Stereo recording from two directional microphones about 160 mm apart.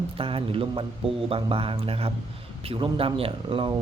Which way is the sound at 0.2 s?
35° right (ahead or behind).